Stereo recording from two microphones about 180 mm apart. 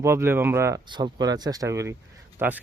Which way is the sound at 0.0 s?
15° right (ahead or behind).